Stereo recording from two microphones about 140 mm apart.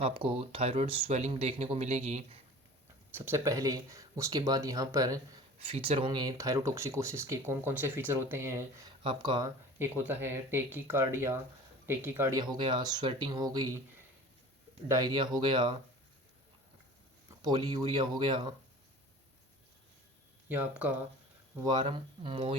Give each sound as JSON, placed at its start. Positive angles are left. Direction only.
{"t": 0.0, "sound": "speech", "side_deg": -40}
{"t": 3.1, "sound": "speech", "side_deg": -15}
{"t": 5.5, "sound": "speech", "side_deg": -45}
{"t": 9.0, "sound": "speech", "side_deg": -35}
{"t": 9.7, "sound": "speech", "side_deg": -15}
{"t": 12.4, "sound": "speech", "side_deg": -35}
{"t": 14.8, "sound": "speech", "side_deg": -25}
{"t": 17.4, "sound": "speech", "side_deg": -30}
{"t": 20.5, "sound": "speech", "side_deg": -15}
{"t": 21.5, "sound": "speech", "side_deg": -30}